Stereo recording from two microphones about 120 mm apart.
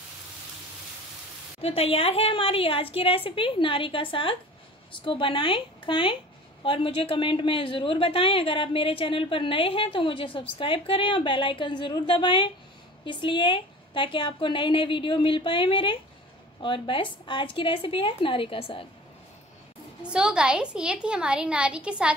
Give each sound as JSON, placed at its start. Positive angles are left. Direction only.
{"t": 1.6, "sound": "a woman's voice", "side_deg": 55}
{"t": 20.0, "sound": "a woman's voice", "side_deg": -5}